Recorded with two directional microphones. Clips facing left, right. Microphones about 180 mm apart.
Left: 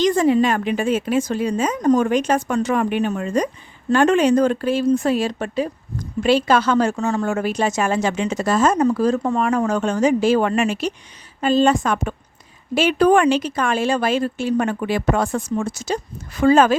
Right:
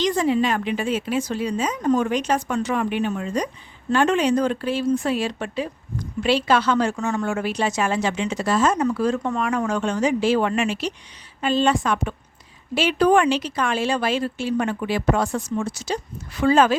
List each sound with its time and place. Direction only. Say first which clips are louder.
0.0 s a woman's voice: left 4 dB; 45° left (ahead or behind)